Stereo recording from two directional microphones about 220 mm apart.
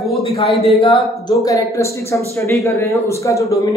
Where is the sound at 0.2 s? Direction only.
25° left (ahead or behind).